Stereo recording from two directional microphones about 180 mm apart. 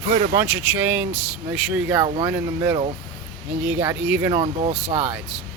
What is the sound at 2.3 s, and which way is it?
Speech, 10° right (ahead or behind).